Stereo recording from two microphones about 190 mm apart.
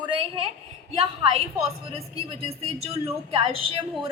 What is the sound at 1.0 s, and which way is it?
Speech, 30° right (ahead or behind).